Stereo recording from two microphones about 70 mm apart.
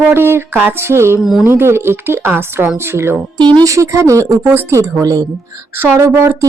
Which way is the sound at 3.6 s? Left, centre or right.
Right.